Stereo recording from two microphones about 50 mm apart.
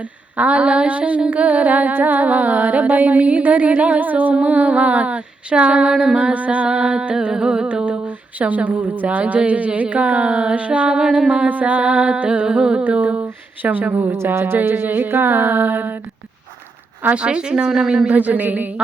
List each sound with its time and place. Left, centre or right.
0.3 s humming: right
4.4 s female singing: right
11.3 s female singing: right
12.9 s humming: right
14.1 s a sound: right
17.2 s speech: centre
18.1 s humming: right